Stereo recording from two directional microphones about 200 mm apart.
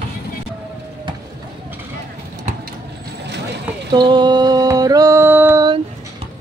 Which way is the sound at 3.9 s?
20° right (ahead or behind).